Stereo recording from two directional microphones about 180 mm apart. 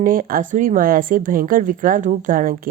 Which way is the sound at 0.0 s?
50° right (ahead or behind).